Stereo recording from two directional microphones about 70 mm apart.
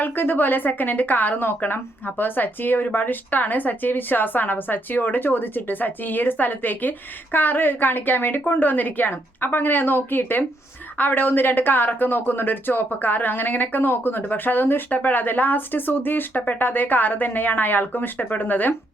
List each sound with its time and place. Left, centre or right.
0.0 s a woman's voice: left